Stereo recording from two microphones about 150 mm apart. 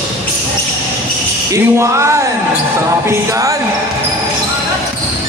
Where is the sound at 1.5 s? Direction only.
20° right (ahead or behind).